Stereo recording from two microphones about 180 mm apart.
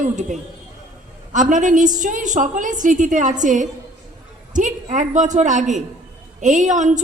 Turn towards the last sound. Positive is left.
turn(degrees=-45)  # may be behind; listen again after turning